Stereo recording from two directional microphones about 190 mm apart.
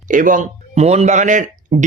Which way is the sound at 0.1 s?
45° right (ahead or behind).